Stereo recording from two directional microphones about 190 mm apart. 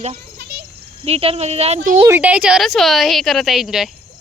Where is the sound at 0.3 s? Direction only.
60° right (ahead or behind).